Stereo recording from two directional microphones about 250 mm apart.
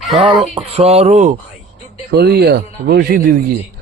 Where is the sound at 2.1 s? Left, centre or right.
Right.